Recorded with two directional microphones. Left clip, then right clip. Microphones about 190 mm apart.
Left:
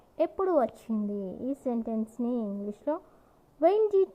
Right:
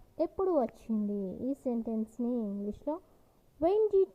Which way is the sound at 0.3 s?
15° right (ahead or behind).